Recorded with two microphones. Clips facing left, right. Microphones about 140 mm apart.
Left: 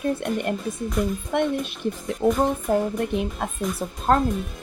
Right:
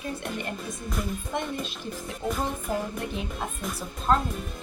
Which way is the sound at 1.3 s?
60° left (ahead or behind).